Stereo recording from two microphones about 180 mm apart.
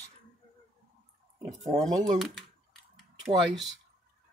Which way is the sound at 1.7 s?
25° right (ahead or behind).